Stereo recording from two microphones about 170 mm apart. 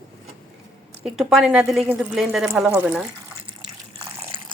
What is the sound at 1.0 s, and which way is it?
A woman's voice, centre (ahead or behind).